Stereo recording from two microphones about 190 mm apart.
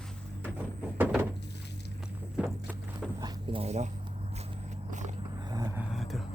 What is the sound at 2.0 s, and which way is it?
Walk, 5° right (ahead or behind).